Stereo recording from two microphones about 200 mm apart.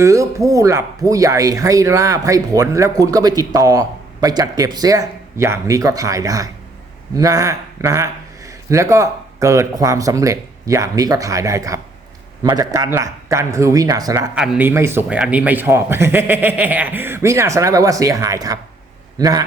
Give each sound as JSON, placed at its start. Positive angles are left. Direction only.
{"t": 0.0, "sound": "speech", "side_deg": -15}
{"t": 14.3, "sound": "a man's voice", "side_deg": -5}